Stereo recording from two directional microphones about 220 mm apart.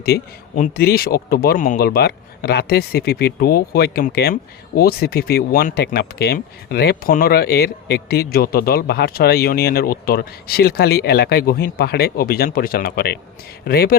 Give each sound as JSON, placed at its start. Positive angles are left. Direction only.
{"t": 0.0, "sound": "speech", "side_deg": 40}